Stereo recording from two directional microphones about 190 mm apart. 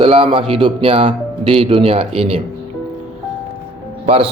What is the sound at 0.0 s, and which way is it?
Speech, 30° right (ahead or behind).